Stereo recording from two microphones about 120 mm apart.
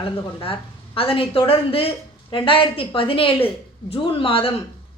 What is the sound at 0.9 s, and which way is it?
A woman's voice, 50° left (ahead or behind).